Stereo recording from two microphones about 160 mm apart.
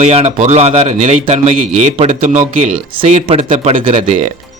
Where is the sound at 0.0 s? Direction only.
40° right (ahead or behind).